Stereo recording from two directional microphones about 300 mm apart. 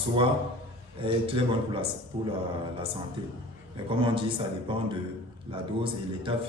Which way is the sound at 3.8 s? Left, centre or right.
Centre.